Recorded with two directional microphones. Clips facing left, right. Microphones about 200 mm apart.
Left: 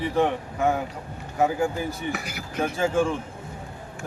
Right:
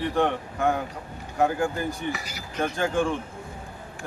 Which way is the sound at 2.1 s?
55° left (ahead or behind).